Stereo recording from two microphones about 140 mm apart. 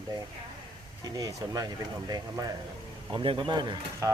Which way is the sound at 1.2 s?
25° right (ahead or behind).